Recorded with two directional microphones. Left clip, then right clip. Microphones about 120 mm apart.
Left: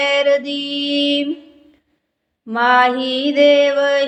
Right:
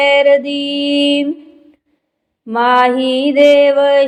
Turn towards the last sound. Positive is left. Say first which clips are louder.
# right 5 dB
turn(degrees=-40)  # may be behind; listen again after turning